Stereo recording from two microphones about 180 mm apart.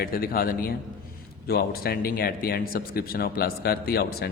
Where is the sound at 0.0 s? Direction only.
55° left (ahead or behind).